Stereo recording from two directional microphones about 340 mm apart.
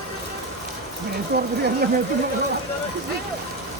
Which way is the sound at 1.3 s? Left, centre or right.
Right.